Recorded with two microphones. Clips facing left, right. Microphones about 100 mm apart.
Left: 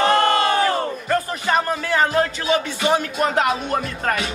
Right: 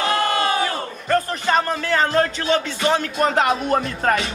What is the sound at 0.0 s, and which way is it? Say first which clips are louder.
Crowd: left 4 dB; 45° left (ahead or behind).